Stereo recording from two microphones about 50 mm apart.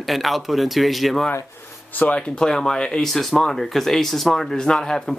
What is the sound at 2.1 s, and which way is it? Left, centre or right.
Speech, centre.